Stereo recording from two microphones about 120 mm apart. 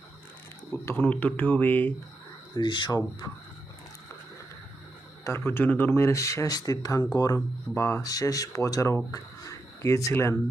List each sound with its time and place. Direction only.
0.7 s speech: 20° left (ahead or behind)
2.6 s speech: 40° left (ahead or behind)
5.2 s speech: 20° left (ahead or behind)
7.7 s speech: 20° left (ahead or behind)